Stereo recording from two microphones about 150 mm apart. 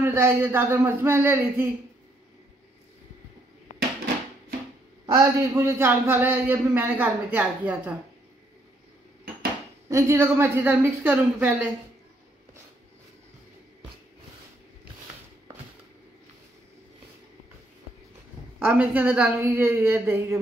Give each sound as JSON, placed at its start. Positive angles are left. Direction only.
{"t": 0.0, "sound": "a man's voice", "side_deg": -15}
{"t": 5.0, "sound": "a man's voice", "side_deg": -25}
{"t": 9.8, "sound": "a man's voice", "side_deg": -20}
{"t": 18.6, "sound": "a man's voice", "side_deg": -10}